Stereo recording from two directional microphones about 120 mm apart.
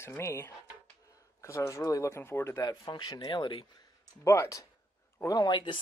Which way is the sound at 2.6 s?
35° left (ahead or behind).